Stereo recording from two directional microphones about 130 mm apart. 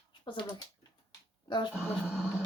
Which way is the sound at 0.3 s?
40° left (ahead or behind).